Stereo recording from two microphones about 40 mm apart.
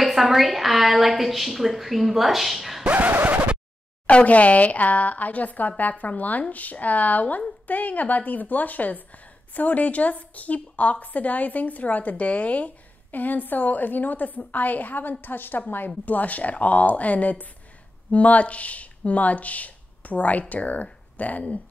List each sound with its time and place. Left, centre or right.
0.0 s a woman's voice: centre
3.0 s scratch: right
4.1 s a woman's voice: left
13.1 s a woman's voice: left
16.1 s a woman's voice: left